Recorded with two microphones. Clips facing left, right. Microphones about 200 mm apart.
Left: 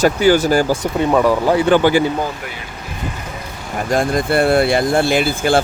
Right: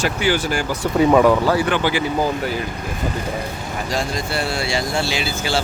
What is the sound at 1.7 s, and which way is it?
Speech, 35° left (ahead or behind).